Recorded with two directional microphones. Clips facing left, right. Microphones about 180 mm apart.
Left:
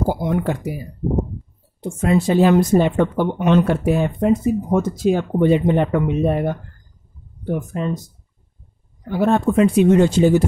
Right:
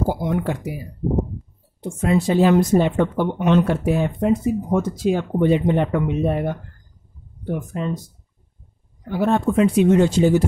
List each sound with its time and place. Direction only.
0.1 s speech: 45° left (ahead or behind)
1.8 s speech: 55° left (ahead or behind)
9.1 s speech: 50° left (ahead or behind)